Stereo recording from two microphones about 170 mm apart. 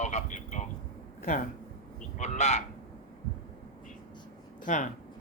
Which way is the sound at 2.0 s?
45° left (ahead or behind).